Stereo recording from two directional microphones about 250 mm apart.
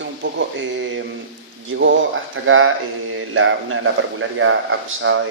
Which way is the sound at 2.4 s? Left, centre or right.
Right.